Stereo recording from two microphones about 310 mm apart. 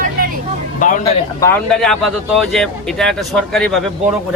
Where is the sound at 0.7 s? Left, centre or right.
Left.